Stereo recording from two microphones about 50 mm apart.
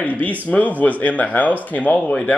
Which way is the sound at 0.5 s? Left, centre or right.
Left.